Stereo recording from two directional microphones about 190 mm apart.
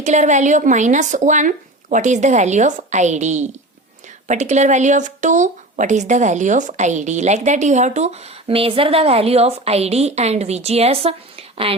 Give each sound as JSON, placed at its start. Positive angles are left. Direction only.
{"t": 0.0, "sound": "speech", "side_deg": -40}